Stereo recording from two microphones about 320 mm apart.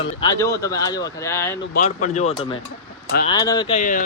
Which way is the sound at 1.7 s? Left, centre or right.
Left.